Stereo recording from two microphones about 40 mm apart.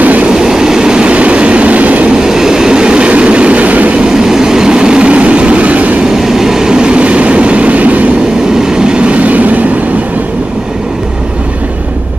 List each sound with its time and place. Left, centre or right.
0.0 s train: right
0.3 s train: centre
1.0 s train: right
2.0 s train: centre; by 4.0 s right
4.0 s vehicle: centre; by 5.9 s right
6.0 s train: centre; by 8.1 s right
8.6 s train: centre; by 9.6 s right